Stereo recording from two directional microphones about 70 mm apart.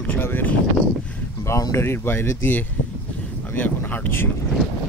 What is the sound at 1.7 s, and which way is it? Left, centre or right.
Speech, left.